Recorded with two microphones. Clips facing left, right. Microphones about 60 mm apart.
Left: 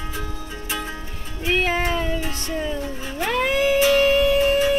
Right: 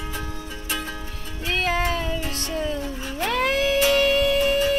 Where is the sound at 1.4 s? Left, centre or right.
Left.